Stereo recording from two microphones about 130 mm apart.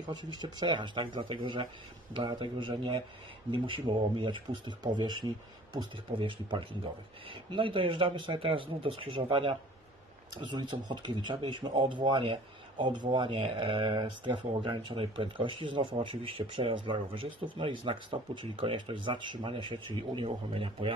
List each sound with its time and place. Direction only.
0.2 s speech: 35° right (ahead or behind)